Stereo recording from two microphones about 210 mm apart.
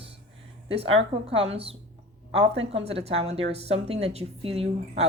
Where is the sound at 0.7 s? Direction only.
25° right (ahead or behind).